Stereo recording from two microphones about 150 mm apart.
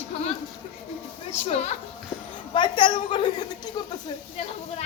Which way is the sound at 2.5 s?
35° left (ahead or behind).